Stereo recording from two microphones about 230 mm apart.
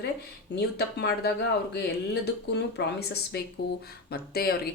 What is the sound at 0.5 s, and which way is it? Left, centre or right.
Speech, left.